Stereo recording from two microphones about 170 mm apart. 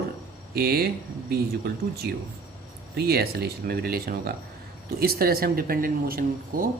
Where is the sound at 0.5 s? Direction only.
65° right (ahead or behind).